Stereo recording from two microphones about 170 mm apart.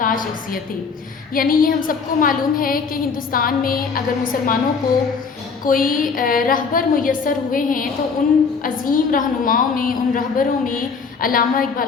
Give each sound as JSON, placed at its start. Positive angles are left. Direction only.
{"t": 0.0, "sound": "a woman's voice", "side_deg": 55}
{"t": 5.6, "sound": "a woman's voice", "side_deg": 55}